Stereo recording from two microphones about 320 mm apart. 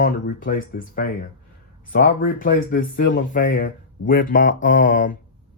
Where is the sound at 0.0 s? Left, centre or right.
Left.